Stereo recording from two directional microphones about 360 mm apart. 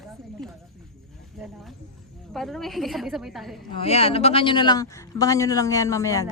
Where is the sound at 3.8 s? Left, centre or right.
Centre.